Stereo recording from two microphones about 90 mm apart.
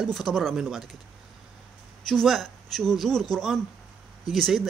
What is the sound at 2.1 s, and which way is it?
Speech, centre (ahead or behind).